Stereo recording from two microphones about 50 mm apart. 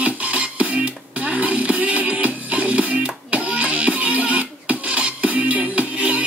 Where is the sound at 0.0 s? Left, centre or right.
Right.